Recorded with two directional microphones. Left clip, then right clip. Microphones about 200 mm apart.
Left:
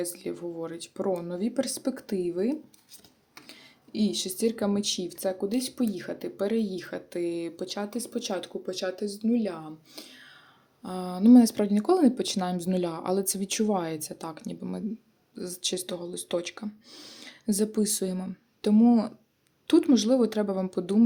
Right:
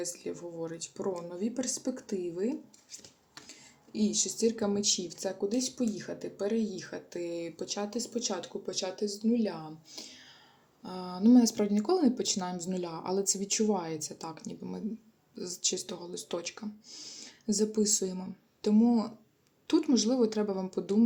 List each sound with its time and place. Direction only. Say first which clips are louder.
0.0 s speech: left 4 dB; 35° left (ahead or behind)
3.4 s a sound: left 3 dB; 40° left (ahead or behind)
4.4 s speech: left 3 dB; 30° left (ahead or behind)